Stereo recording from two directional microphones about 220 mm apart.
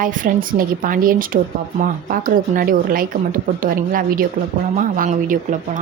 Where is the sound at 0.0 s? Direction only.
40° right (ahead or behind).